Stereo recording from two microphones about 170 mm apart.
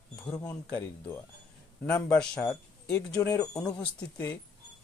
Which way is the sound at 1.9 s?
5° left (ahead or behind).